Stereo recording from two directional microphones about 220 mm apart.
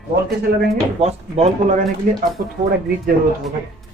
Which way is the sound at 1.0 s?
30° right (ahead or behind).